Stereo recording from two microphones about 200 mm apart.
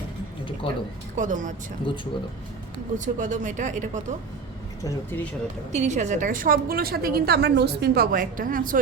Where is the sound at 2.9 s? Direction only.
40° right (ahead or behind).